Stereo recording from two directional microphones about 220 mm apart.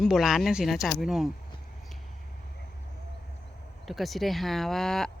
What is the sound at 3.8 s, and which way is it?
Speech, centre (ahead or behind).